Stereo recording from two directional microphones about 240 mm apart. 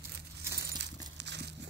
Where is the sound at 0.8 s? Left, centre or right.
Right.